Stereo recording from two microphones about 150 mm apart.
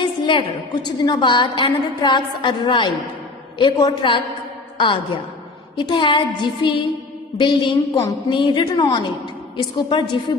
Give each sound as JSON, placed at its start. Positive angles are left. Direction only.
{"t": 0.0, "sound": "a woman's voice", "side_deg": 30}